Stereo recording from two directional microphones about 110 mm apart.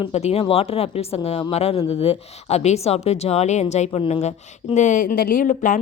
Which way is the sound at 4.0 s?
70° left (ahead or behind).